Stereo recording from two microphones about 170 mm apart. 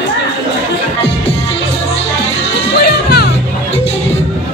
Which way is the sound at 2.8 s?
70° left (ahead or behind).